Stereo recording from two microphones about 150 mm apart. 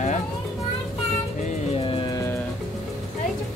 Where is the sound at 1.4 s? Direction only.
50° left (ahead or behind).